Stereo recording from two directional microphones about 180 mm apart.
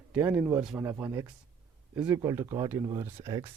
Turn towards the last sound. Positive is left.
turn(degrees=-20)  # may be behind; listen again after turning